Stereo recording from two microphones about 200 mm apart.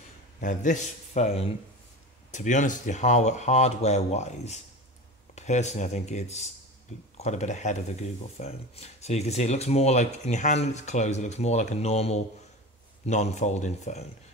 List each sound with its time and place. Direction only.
0.4 s speech: 40° left (ahead or behind)